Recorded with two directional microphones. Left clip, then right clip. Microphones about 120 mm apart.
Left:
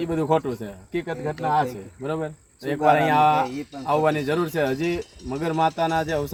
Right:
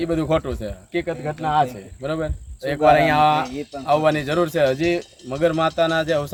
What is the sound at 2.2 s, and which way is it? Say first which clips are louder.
Speech: right 4 dB; 20° right (ahead or behind).